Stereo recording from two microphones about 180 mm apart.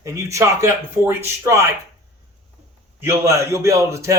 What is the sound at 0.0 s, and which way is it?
A man's voice, 15° right (ahead or behind).